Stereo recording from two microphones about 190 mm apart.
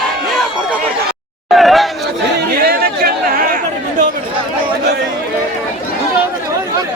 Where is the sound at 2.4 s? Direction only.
55° right (ahead or behind).